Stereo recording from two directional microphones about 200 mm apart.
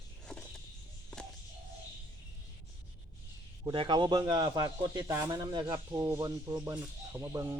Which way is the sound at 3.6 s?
25° right (ahead or behind).